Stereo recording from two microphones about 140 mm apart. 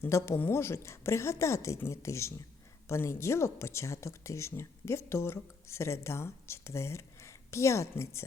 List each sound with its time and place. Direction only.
0.0 s speech: 20° left (ahead or behind)